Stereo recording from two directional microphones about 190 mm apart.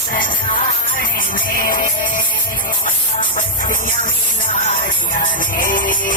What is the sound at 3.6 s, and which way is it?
Music, 45° left (ahead or behind).